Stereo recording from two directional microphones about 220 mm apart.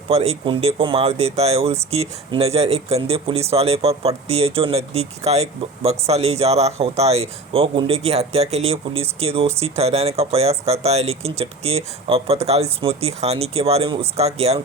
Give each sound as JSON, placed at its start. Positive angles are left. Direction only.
{"t": 0.1, "sound": "speech", "side_deg": -25}